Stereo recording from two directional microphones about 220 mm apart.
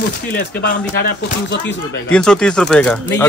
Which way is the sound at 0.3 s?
45° left (ahead or behind).